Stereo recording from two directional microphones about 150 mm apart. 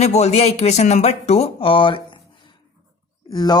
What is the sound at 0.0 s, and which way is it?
A woman's voice, 45° left (ahead or behind).